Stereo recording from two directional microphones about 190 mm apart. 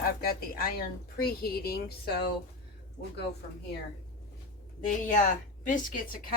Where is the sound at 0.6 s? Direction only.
50° left (ahead or behind).